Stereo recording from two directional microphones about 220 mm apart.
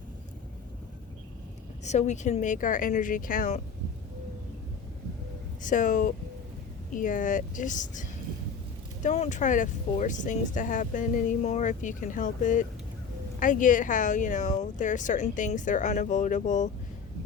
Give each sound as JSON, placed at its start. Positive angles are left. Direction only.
{"t": 1.8, "sound": "speech", "side_deg": 30}
{"t": 5.6, "sound": "speech", "side_deg": 35}
{"t": 9.0, "sound": "speech", "side_deg": 30}